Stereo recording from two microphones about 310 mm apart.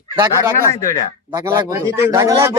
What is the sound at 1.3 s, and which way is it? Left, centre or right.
A man's voice, centre.